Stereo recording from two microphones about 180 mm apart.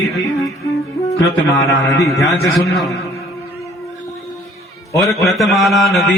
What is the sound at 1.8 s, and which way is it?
Speech, 20° left (ahead or behind).